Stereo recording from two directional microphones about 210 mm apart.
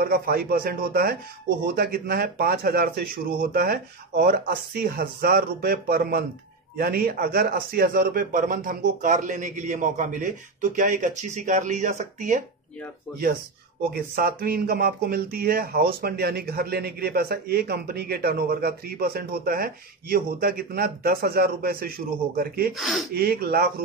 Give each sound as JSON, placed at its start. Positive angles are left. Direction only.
{"t": 0.0, "sound": "speech", "side_deg": -45}
{"t": 13.8, "sound": "speech", "side_deg": -45}
{"t": 22.8, "sound": "speech", "side_deg": 0}
{"t": 23.1, "sound": "speech", "side_deg": -50}